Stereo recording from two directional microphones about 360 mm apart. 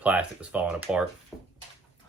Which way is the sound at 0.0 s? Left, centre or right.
Centre.